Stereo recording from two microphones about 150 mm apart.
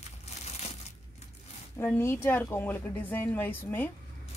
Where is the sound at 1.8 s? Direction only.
15° left (ahead or behind).